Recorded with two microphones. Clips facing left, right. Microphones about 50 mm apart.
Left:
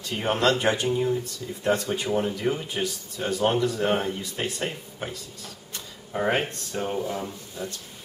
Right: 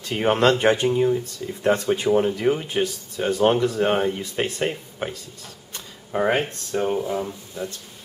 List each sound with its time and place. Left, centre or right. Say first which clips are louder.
0.1 s speech: right 5 dB; right
1.2 s speech: right 5 dB; right
6.3 s speech: right 4 dB; centre